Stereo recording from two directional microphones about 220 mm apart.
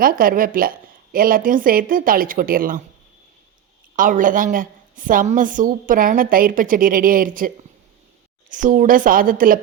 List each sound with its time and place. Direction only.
0.0 s a woman's voice: 40° right (ahead or behind)
3.9 s a woman's voice: 35° right (ahead or behind)